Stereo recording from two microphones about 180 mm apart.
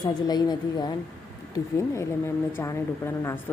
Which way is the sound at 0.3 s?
25° left (ahead or behind).